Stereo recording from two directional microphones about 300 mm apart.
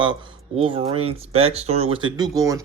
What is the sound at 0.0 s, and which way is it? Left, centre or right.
Speech, centre.